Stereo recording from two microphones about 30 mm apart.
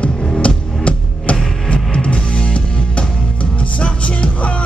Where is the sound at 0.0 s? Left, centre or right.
Left.